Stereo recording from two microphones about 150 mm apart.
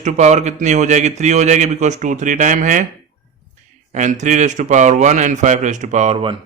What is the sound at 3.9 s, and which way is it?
Speech, 55° right (ahead or behind).